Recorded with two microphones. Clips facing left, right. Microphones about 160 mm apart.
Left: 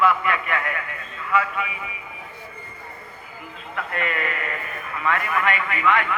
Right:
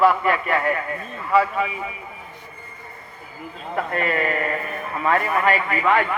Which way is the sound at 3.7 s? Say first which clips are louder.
Right 5 dB; 35° right (ahead or behind).